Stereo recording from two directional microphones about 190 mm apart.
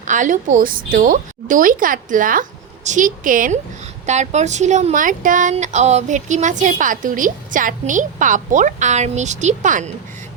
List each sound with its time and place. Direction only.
0.0 s a woman's voice: 40° right (ahead or behind)